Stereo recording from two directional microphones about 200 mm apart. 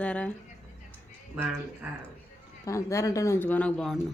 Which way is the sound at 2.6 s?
15° left (ahead or behind).